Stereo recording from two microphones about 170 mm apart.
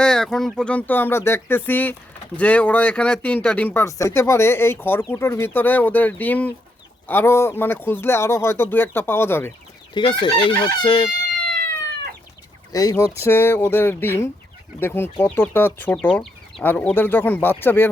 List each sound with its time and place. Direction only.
0.0 s speech: 5° left (ahead or behind)
9.9 s chicken: 25° left (ahead or behind)
12.7 s speech: 20° left (ahead or behind)
16.1 s chicken: centre (ahead or behind)
16.6 s speech: 10° left (ahead or behind)